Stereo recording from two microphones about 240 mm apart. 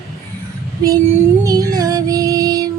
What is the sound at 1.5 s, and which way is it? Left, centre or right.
Music, centre.